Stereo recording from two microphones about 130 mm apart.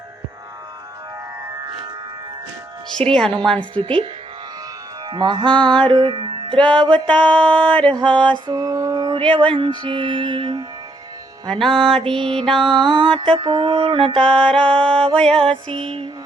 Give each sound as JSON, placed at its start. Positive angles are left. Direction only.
{"t": 2.9, "sound": "speech", "side_deg": 5}
{"t": 3.6, "sound": "music", "side_deg": -40}
{"t": 5.0, "sound": "music", "side_deg": -35}
{"t": 6.6, "sound": "music", "side_deg": 10}
{"t": 7.9, "sound": "music", "side_deg": -35}
{"t": 8.4, "sound": "mantra", "side_deg": -30}
{"t": 9.3, "sound": "music", "side_deg": -40}
{"t": 11.4, "sound": "speech", "side_deg": 5}
{"t": 12.2, "sound": "music", "side_deg": -40}
{"t": 14.2, "sound": "speech", "side_deg": 5}
{"t": 14.6, "sound": "music", "side_deg": -40}
{"t": 15.1, "sound": "speech", "side_deg": 5}
{"t": 15.7, "sound": "music", "side_deg": -45}